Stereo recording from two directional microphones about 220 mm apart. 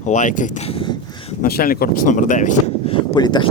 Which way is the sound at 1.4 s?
40° left (ahead or behind).